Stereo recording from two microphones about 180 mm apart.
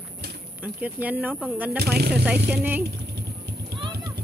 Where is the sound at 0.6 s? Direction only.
10° right (ahead or behind).